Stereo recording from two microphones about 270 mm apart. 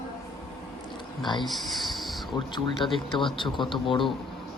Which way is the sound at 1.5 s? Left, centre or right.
Centre.